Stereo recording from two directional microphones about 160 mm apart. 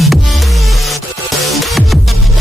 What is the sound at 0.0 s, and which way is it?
Music, centre (ahead or behind).